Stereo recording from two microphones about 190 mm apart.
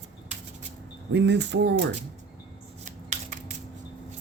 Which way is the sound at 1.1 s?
65° right (ahead or behind).